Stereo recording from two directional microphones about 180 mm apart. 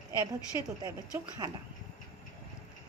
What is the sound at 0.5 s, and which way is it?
Speech, 20° right (ahead or behind).